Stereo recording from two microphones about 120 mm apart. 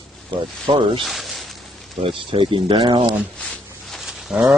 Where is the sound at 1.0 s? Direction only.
Centre (ahead or behind).